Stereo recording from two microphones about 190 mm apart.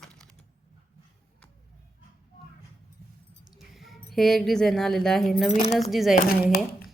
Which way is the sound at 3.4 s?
Centre (ahead or behind).